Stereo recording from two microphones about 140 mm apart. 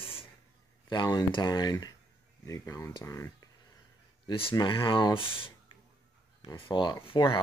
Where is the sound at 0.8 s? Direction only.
30° left (ahead or behind).